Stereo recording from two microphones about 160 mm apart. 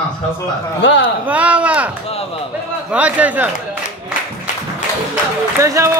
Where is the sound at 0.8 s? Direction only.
90° left.